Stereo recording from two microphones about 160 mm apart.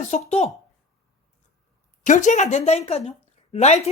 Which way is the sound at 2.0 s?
50° left (ahead or behind).